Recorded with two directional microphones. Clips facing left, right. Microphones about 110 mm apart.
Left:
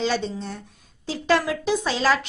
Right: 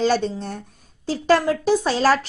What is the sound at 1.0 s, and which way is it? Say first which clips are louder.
A woman's voice: right 4 dB; 40° right (ahead or behind).